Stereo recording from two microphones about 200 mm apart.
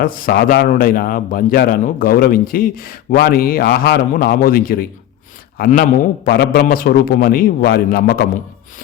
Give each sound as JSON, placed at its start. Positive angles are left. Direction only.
{"t": 0.0, "sound": "a man's voice", "side_deg": 45}